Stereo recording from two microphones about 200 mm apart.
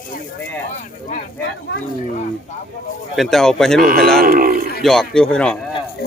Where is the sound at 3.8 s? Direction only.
50° right (ahead or behind).